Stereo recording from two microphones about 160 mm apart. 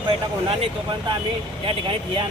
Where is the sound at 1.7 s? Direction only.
35° right (ahead or behind).